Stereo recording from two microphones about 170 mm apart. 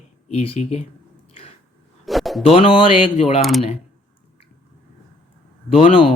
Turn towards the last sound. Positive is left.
turn(degrees=30)  # may be behind; listen again after turning